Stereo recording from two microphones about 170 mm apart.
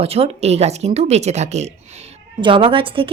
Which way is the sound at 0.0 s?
35° right (ahead or behind).